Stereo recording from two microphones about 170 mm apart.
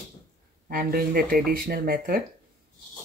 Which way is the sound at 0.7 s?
60° right (ahead or behind).